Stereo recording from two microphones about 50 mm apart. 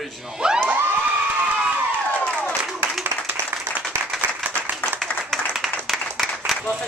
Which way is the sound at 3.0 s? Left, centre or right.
Right.